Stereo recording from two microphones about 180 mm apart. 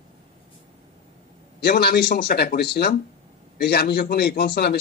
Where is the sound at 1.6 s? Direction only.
60° left (ahead or behind).